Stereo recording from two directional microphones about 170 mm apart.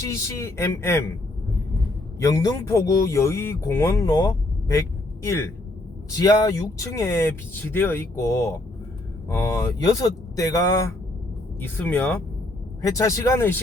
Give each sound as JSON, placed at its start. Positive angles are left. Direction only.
{"t": 0.0, "sound": "speech", "side_deg": 15}
{"t": 2.1, "sound": "speech", "side_deg": 20}